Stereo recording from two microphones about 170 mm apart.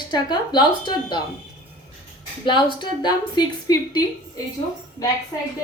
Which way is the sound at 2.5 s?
30° left (ahead or behind).